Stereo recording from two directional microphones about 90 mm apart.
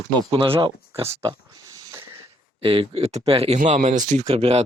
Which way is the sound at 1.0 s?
30° right (ahead or behind).